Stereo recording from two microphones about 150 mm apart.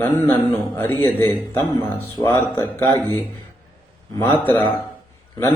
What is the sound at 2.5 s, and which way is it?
Speech, 15° left (ahead or behind).